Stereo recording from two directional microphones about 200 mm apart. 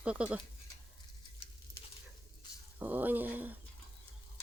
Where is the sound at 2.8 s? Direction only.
10° right (ahead or behind).